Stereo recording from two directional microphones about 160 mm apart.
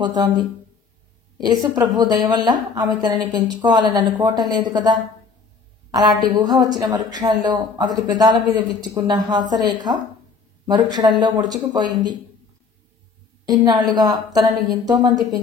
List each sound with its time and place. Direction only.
0.0 s a woman's voice: 25° right (ahead or behind)
13.5 s speech: 25° right (ahead or behind)